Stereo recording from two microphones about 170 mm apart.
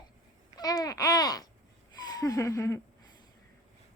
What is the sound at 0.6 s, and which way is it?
Babbling, 20° left (ahead or behind).